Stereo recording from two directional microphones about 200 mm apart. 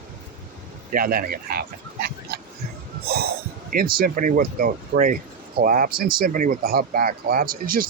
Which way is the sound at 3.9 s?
45° right (ahead or behind).